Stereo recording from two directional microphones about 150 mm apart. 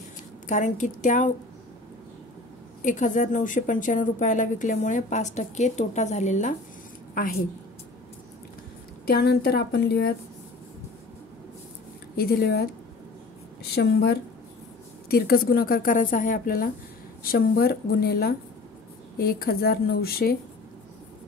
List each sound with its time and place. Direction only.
0.5 s a woman's voice: 55° left (ahead or behind)
2.8 s a woman's voice: 55° left (ahead or behind)
7.2 s a woman's voice: 65° left (ahead or behind)
9.0 s a woman's voice: 90° left
12.2 s a woman's voice: 90° left
13.7 s a woman's voice: 90° left; by 16.6 s 65° left (ahead or behind)
17.2 s a woman's voice: 75° left (ahead or behind)